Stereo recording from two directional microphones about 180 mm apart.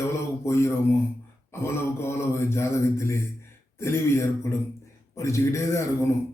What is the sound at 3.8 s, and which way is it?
A man's voice, 15° left (ahead or behind).